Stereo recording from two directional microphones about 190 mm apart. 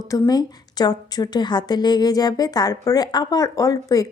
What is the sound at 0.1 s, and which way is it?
A woman's voice, 20° left (ahead or behind).